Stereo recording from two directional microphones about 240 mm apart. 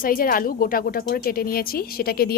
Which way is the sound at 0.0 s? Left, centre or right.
Left.